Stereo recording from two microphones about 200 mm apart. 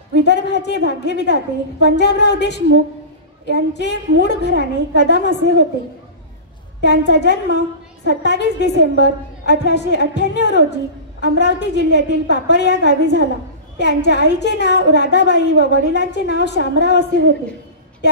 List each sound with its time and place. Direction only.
0.2 s a woman's voice: 60° left (ahead or behind)
6.8 s a woman's voice: 60° left (ahead or behind)